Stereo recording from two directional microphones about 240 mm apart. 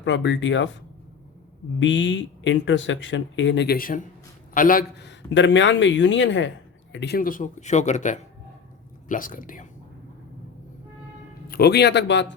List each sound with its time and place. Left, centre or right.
0.0 s speech: left
1.8 s speech: left
11.4 s speech: left